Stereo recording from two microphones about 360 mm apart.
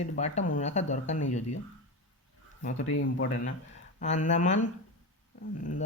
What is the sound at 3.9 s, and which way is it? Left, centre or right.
Speech, left.